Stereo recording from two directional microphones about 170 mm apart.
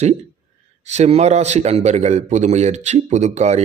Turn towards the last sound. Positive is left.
turn(degrees=-40)  # may be behind; listen again after turning